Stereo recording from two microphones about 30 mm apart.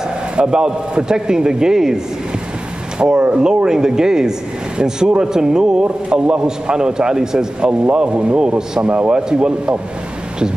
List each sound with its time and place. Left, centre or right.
0.5 s a man's voice: right
3.0 s speech: right
3.4 s a man's voice: right
7.8 s a man's voice: right